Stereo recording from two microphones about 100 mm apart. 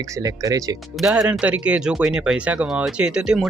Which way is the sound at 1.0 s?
Centre (ahead or behind).